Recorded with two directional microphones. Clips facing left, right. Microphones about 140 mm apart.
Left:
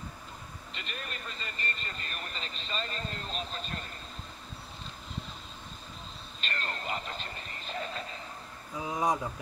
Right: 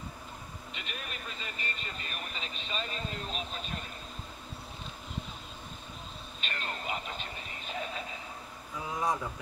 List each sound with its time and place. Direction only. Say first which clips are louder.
0.7 s speech: left 1 dB; 5° right (ahead or behind)
6.4 s speech: left 1 dB; 5° right (ahead or behind)
8.7 s speech: left 2 dB; 20° left (ahead or behind)